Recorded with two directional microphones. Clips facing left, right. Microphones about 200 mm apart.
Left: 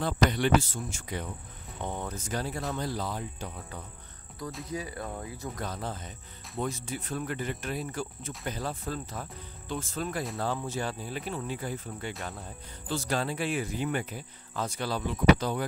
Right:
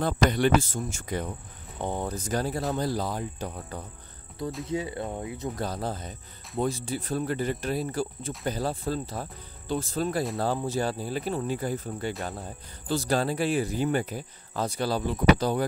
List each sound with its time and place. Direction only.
0.0 s speech: 45° right (ahead or behind)
4.6 s speech: 25° right (ahead or behind)
5.6 s speech: 35° right (ahead or behind)